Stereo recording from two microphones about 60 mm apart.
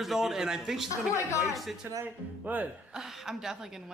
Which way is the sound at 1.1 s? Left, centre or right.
Left.